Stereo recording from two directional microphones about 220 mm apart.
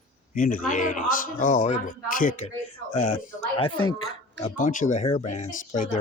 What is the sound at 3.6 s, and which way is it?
Speech, 80° left.